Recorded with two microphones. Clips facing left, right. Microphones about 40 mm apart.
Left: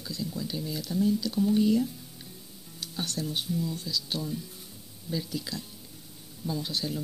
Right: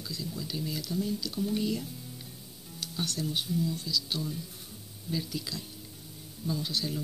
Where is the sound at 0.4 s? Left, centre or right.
Centre.